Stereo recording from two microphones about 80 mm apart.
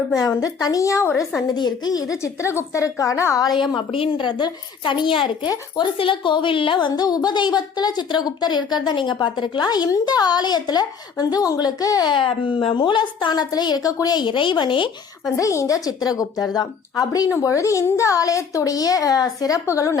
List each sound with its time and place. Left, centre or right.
0.2 s a child's voice: left
1.5 s a child's voice: left
3.8 s a child's voice: left
5.5 s a woman's voice: left
12.1 s a woman's voice: left
15.4 s a child's voice: left